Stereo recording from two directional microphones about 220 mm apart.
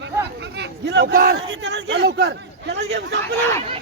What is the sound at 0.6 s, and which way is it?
A man's voice, 50° right (ahead or behind).